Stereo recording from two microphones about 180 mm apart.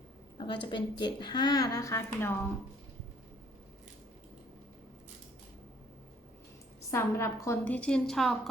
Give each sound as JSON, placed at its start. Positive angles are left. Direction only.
{"t": 0.3, "sound": "a woman's voice", "side_deg": 25}
{"t": 6.9, "sound": "a woman's voice", "side_deg": 15}